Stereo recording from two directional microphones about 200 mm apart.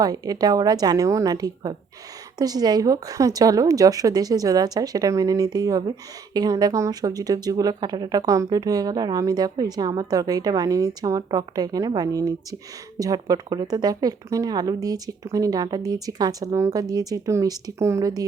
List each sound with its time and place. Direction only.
0.0 s a woman's voice: 20° right (ahead or behind)